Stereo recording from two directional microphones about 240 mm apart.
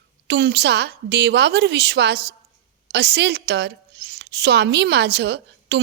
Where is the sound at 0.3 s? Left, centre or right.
Right.